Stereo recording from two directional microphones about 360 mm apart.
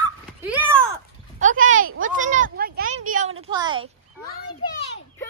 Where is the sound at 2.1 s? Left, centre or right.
Right.